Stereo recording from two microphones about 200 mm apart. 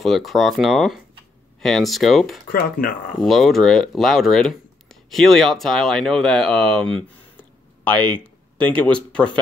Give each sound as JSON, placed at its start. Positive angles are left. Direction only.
{"t": 0.0, "sound": "speech", "side_deg": 0}
{"t": 2.4, "sound": "speech", "side_deg": 45}
{"t": 3.2, "sound": "speech", "side_deg": 0}